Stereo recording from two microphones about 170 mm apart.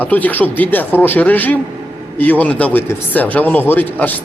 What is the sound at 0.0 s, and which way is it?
Speech, 10° left (ahead or behind).